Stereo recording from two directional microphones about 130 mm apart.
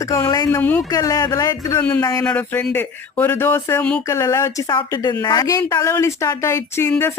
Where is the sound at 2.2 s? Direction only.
10° left (ahead or behind).